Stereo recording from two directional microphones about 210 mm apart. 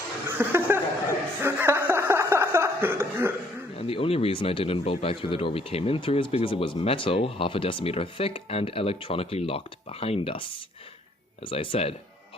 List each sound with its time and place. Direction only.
0.3 s chuckle: 10° right (ahead or behind)
3.8 s speech: 25° left (ahead or behind)